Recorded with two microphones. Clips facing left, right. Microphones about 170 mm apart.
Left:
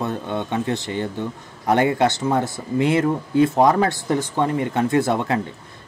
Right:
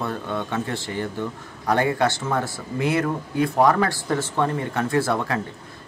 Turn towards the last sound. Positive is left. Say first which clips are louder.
# left 3 dB
turn(degrees=20)  # may be behind; listen again after turning